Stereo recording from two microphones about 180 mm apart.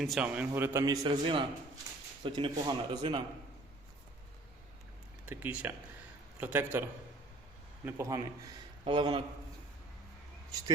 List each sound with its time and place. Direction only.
0.0 s a man's voice: 5° right (ahead or behind)
1.0 s a man's voice: 25° right (ahead or behind)
5.3 s a man's voice: 10° right (ahead or behind)
7.9 s a man's voice: 15° right (ahead or behind)
8.8 s a man's voice: 25° right (ahead or behind)